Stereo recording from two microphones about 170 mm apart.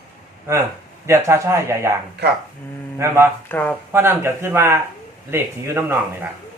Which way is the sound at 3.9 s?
15° right (ahead or behind).